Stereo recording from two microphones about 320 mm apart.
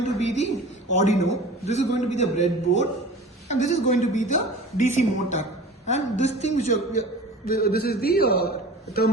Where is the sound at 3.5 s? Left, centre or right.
Left.